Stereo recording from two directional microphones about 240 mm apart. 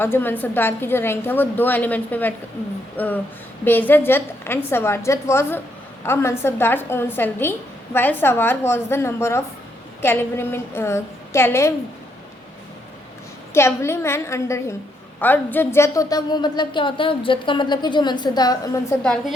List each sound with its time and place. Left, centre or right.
0.0 s a woman's voice: centre
13.5 s a woman's voice: centre